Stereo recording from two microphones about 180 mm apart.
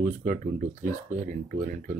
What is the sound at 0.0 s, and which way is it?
Speech, 45° right (ahead or behind).